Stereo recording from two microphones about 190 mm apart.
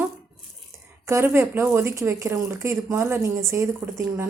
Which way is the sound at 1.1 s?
10° right (ahead or behind).